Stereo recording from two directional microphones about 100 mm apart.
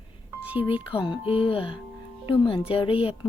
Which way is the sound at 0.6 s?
65° left (ahead or behind).